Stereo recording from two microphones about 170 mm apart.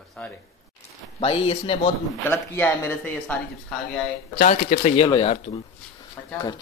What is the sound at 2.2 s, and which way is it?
Speech, 15° left (ahead or behind).